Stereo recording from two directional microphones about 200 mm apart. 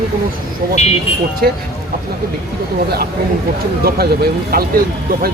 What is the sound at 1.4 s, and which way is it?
Speech, 50° right (ahead or behind).